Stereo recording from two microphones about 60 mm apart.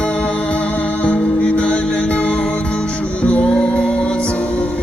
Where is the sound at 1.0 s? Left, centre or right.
Left.